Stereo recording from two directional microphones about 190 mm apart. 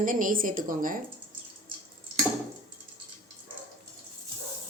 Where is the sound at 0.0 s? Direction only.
45° right (ahead or behind).